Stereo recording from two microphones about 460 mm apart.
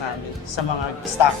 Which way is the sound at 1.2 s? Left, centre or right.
Left.